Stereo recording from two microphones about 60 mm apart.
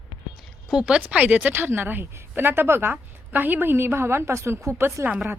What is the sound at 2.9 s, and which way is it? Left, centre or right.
A woman's voice, right.